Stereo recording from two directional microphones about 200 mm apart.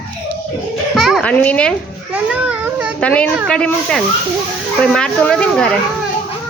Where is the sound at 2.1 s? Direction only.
5° right (ahead or behind).